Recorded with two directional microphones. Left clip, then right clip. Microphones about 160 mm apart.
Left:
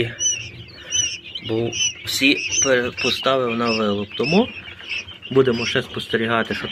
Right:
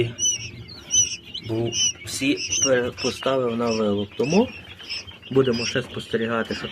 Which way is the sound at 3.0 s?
10° right (ahead or behind).